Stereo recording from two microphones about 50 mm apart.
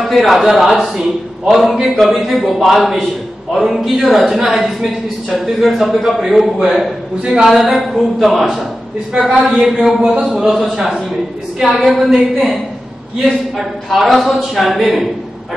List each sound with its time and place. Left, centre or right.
0.0 s a man's voice: centre
10.0 s speech: right
10.3 s a man's voice: centre
13.2 s a man's voice: centre